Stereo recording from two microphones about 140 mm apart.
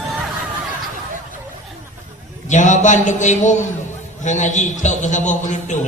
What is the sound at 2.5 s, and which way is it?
A man's voice, 65° left (ahead or behind).